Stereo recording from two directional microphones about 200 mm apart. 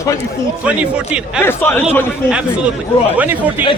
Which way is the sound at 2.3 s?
5° right (ahead or behind).